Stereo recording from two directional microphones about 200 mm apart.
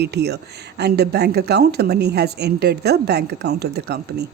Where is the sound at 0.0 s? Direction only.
55° right (ahead or behind).